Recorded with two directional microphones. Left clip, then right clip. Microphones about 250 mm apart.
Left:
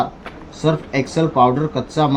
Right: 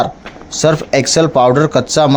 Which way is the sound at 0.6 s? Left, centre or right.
Right.